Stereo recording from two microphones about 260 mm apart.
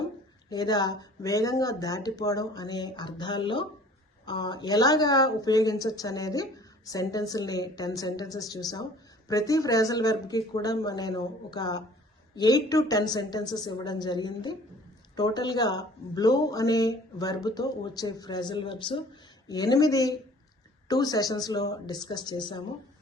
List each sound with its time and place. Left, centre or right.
0.5 s a woman's voice: centre